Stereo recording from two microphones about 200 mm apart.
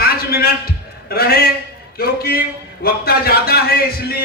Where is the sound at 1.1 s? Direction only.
50° left (ahead or behind).